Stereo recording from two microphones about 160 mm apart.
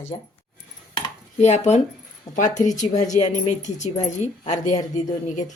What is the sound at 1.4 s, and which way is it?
Speech, 45° left (ahead or behind).